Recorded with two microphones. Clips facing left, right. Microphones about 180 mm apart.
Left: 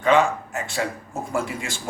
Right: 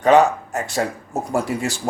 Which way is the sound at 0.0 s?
40° right (ahead or behind).